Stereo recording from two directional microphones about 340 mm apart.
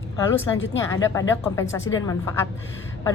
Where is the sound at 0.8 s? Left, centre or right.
Centre.